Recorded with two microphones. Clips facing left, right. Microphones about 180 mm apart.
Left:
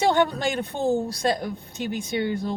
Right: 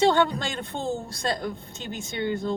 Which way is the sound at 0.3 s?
20° left (ahead or behind).